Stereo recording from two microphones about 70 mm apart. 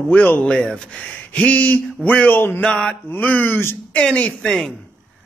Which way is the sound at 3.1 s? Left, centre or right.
Left.